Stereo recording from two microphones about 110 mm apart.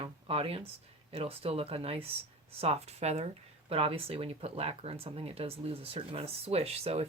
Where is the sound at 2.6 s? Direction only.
75° right (ahead or behind).